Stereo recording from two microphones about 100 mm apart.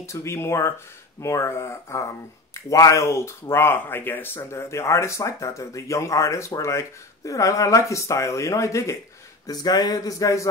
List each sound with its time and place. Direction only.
0.0 s speech: 30° left (ahead or behind)
9.5 s speech: 40° left (ahead or behind)